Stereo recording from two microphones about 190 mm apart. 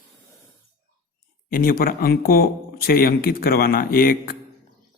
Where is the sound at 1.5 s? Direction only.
50° left (ahead or behind).